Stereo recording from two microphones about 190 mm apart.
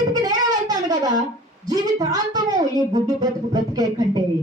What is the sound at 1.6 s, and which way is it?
Speech, 20° right (ahead or behind).